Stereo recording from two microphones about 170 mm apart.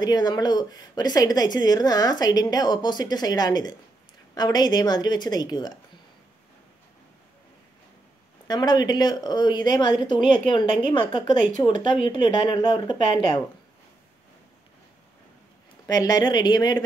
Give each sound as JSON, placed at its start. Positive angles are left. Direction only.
{"t": 0.0, "sound": "a woman's voice", "side_deg": 25}
{"t": 8.5, "sound": "a woman's voice", "side_deg": 25}
{"t": 15.9, "sound": "a woman's voice", "side_deg": 20}